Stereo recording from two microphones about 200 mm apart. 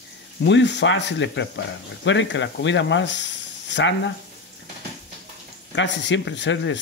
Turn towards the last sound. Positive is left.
turn(degrees=65)  # may be behind; listen again after turning